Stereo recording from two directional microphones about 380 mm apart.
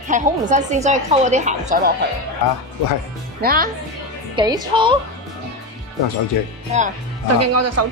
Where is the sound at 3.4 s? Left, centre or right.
Right.